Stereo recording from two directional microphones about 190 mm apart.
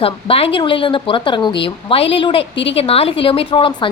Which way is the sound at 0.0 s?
30° left (ahead or behind).